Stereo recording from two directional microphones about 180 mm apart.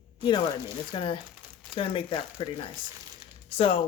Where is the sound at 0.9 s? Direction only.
30° left (ahead or behind).